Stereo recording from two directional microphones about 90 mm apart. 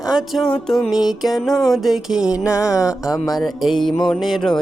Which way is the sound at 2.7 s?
40° left (ahead or behind).